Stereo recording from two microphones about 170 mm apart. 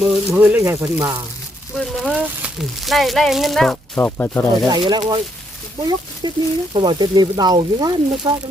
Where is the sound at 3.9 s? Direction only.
15° left (ahead or behind).